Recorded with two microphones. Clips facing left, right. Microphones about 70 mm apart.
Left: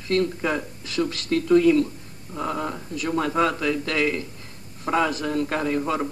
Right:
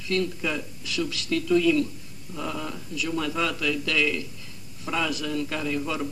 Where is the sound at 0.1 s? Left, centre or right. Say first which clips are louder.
Left 4 dB; left.